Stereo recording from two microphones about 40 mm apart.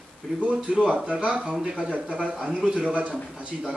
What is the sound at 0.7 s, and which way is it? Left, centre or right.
A man's voice, right.